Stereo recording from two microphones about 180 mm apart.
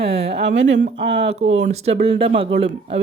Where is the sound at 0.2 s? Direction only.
65° right (ahead or behind).